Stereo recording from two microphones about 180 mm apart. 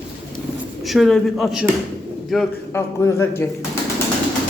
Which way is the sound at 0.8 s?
Centre (ahead or behind).